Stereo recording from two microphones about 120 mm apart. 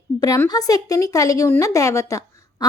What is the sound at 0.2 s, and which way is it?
A woman's voice, 30° left (ahead or behind).